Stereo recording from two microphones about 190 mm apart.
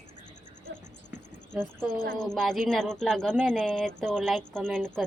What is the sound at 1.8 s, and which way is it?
Speech, 20° left (ahead or behind).